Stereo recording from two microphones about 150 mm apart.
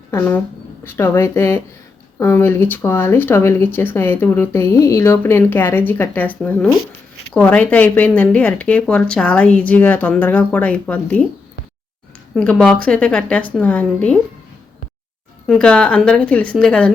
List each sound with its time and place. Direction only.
0.1 s speech: 15° left (ahead or behind)
12.3 s a woman's voice: 5° left (ahead or behind)
15.4 s a woman's voice: 5° left (ahead or behind)